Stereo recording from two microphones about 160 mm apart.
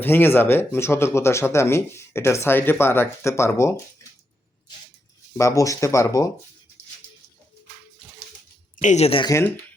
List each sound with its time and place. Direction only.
0.0 s speech: 15° left (ahead or behind)
5.4 s speech: 20° left (ahead or behind)
8.7 s speech: 50° left (ahead or behind)
9.2 s speech: 20° left (ahead or behind)